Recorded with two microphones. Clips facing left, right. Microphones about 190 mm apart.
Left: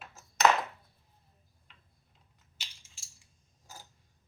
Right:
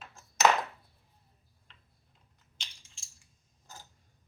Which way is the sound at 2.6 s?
5° left (ahead or behind).